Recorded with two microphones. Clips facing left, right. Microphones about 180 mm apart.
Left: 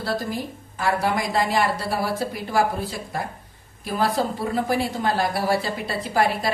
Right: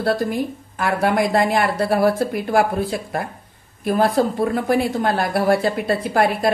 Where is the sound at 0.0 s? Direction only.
55° right (ahead or behind).